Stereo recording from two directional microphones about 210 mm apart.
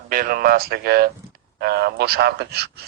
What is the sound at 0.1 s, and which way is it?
A man's voice, 40° right (ahead or behind).